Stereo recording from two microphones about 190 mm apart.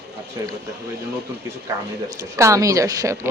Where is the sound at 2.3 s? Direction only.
15° right (ahead or behind).